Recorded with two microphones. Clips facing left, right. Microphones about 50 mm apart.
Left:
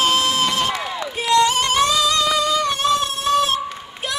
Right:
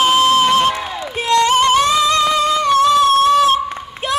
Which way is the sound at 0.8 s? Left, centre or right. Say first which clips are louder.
Right 2 dB; right.